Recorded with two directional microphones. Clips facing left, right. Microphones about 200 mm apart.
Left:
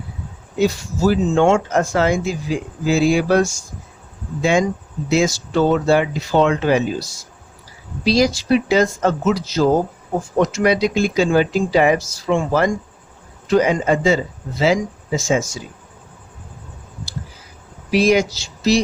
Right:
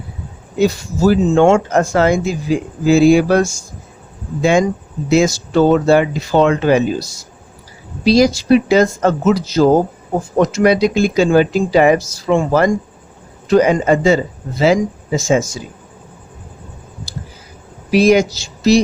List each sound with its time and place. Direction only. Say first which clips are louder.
0.6 s speech: right 3 dB; 50° right (ahead or behind)
5.0 s speech: right 4 dB; 45° right (ahead or behind)
8.0 s speech: right 5 dB; 45° right (ahead or behind)
17.9 s speech: right 4 dB; 45° right (ahead or behind)